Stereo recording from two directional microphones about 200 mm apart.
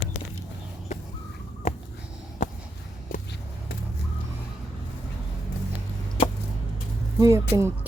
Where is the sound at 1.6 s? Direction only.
35° left (ahead or behind).